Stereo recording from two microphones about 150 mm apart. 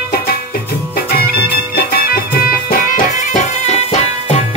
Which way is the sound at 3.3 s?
45° left (ahead or behind).